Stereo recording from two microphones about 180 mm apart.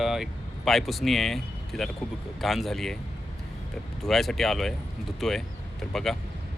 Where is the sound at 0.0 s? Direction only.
Centre (ahead or behind).